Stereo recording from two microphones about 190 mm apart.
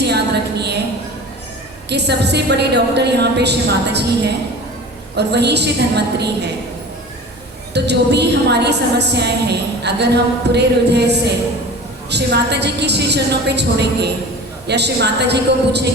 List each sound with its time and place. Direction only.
0.0 s a sound: 60° right (ahead or behind)
1.9 s a woman's voice: 60° right (ahead or behind)
7.7 s a woman's voice: 60° right (ahead or behind)